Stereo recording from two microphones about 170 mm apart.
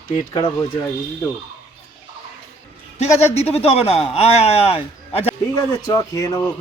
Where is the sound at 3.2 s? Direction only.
40° left (ahead or behind).